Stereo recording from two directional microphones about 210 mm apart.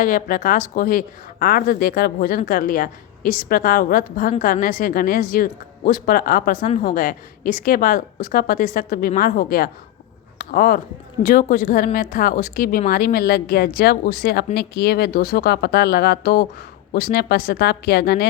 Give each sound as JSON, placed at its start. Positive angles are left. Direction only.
{"t": 0.0, "sound": "speech", "side_deg": 40}
{"t": 10.3, "sound": "a sound", "side_deg": 45}
{"t": 11.2, "sound": "speech", "side_deg": 40}